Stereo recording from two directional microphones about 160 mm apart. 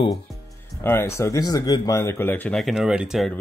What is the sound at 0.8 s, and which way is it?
Speech, 15° left (ahead or behind).